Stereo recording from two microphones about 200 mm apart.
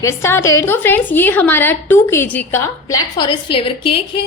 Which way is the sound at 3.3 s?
25° left (ahead or behind).